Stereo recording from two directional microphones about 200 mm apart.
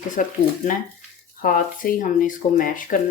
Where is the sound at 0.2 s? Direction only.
40° left (ahead or behind).